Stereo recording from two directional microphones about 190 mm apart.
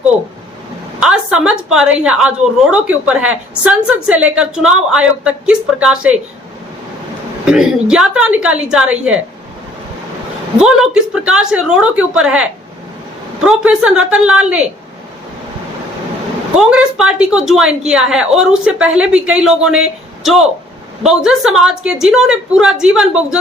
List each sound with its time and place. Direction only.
0.9 s a woman's voice: 5° right (ahead or behind)
7.4 s a woman's voice: 5° right (ahead or behind)
10.6 s a woman's voice: 5° right (ahead or behind)
16.6 s a woman's voice: 5° right (ahead or behind)